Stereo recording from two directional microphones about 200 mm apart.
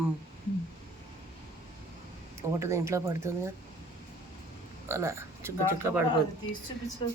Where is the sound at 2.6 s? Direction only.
15° right (ahead or behind).